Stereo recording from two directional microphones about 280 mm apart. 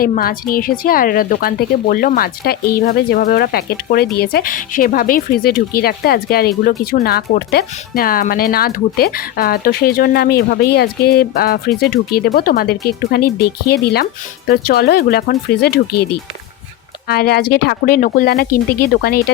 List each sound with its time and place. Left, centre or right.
0.0 s speech: left
17.1 s speech: left